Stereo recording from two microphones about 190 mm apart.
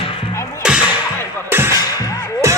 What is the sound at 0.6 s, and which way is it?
Whip, 5° right (ahead or behind).